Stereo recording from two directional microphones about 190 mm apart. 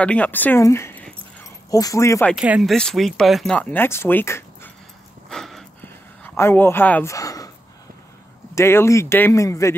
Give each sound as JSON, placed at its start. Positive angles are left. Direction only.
{"t": 0.0, "sound": "speech", "side_deg": 5}
{"t": 2.3, "sound": "speech", "side_deg": -5}
{"t": 5.3, "sound": "a sound", "side_deg": 0}
{"t": 8.5, "sound": "speech", "side_deg": 15}